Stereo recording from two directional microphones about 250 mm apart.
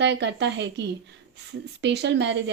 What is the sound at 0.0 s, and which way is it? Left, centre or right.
Speech, right.